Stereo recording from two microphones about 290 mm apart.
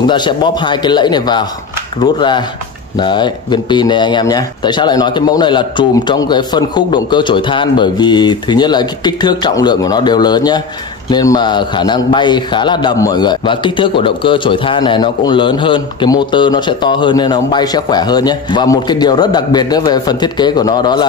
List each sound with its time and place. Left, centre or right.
0.0 s a man's voice: centre